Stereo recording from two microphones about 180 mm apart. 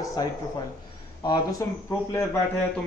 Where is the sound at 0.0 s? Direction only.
20° left (ahead or behind).